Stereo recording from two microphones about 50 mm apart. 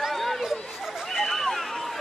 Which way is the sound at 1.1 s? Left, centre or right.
Centre.